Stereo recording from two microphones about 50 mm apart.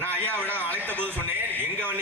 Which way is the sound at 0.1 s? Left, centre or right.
Right.